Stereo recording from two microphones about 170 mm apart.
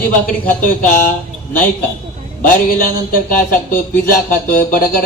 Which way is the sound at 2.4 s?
55° left (ahead or behind).